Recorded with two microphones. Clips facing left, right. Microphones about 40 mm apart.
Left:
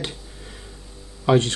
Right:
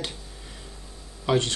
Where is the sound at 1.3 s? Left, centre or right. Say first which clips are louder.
Left 5 dB; centre.